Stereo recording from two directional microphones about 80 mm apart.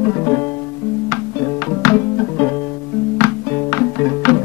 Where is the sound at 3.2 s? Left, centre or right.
Left.